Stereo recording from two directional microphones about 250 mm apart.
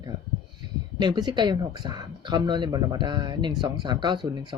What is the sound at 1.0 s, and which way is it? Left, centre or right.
Speech, centre.